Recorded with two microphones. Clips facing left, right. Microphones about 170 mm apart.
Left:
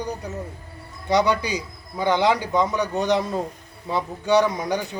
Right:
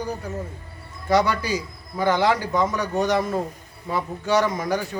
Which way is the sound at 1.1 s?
15° left (ahead or behind).